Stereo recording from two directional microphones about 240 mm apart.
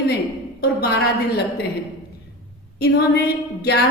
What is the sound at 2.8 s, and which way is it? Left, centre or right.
A woman's voice, left.